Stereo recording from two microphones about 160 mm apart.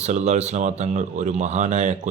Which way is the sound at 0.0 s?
45° right (ahead or behind).